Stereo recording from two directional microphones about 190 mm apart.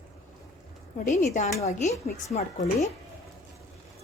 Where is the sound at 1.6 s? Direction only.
35° left (ahead or behind).